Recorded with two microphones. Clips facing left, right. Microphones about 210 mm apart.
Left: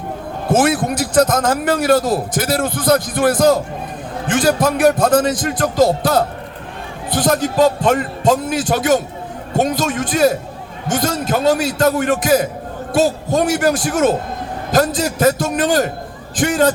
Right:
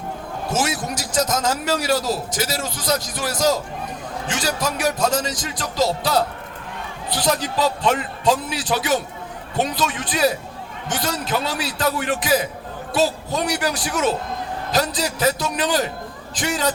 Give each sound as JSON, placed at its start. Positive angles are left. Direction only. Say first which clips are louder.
{"t": 0.5, "sound": "a man's voice", "louder": "left 9 dB", "side_deg": 55}